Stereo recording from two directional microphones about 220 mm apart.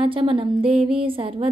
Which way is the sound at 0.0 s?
25° right (ahead or behind).